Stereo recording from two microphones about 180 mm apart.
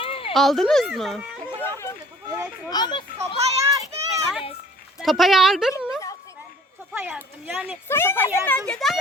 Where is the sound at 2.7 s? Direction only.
25° left (ahead or behind).